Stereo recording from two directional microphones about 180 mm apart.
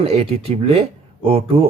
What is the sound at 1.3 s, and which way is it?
Speech, 30° right (ahead or behind).